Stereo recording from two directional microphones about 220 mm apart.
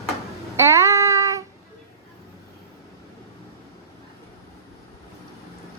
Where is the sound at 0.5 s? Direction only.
10° right (ahead or behind).